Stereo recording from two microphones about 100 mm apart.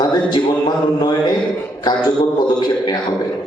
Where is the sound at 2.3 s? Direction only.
45° left (ahead or behind).